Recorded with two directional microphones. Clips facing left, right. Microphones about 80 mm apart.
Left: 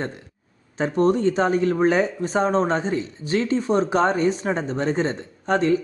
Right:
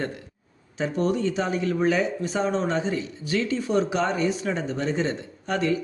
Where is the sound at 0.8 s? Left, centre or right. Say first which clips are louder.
Left 5 dB; left.